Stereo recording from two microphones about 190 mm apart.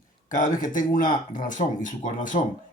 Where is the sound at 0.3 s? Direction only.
45° left (ahead or behind).